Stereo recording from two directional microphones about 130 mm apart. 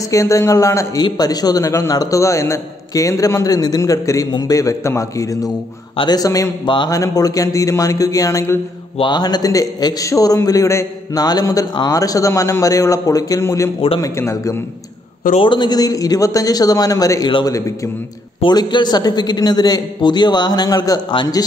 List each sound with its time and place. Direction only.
0.1 s a man's voice: 25° left (ahead or behind)
8.9 s a man's voice: 35° left (ahead or behind)
15.3 s a man's voice: 40° left (ahead or behind); by 17.7 s 25° left (ahead or behind)
18.4 s a man's voice: 35° left (ahead or behind)